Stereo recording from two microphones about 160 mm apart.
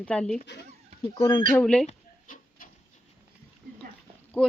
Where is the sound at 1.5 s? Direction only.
10° left (ahead or behind).